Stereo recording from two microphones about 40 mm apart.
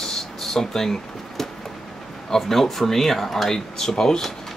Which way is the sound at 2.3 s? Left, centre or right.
Centre.